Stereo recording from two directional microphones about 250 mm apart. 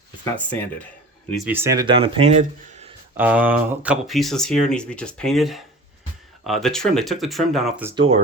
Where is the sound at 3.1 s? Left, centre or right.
Centre.